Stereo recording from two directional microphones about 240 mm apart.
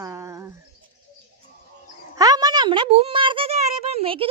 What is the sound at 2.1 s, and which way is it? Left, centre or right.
A woman's voice, centre.